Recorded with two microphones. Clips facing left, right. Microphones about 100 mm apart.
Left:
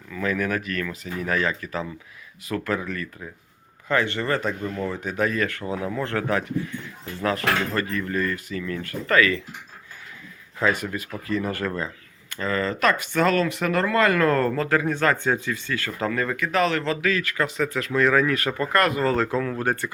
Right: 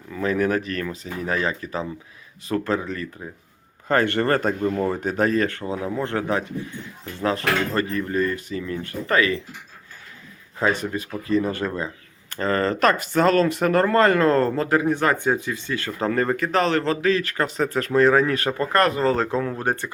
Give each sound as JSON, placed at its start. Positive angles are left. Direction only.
{"t": 0.1, "sound": "speech", "side_deg": -30}
{"t": 3.8, "sound": "speech", "side_deg": -50}
{"t": 10.6, "sound": "speech", "side_deg": -30}
{"t": 12.3, "sound": "speech", "side_deg": -35}
{"t": 16.1, "sound": "a man's voice", "side_deg": -35}